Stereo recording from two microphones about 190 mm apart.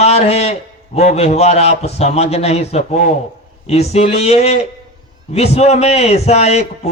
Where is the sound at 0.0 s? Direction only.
35° left (ahead or behind).